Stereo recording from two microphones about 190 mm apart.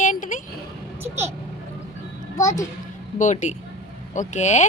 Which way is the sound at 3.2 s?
40° left (ahead or behind).